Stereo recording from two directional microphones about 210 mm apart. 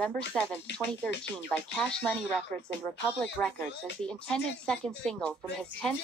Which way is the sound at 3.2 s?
5° left (ahead or behind).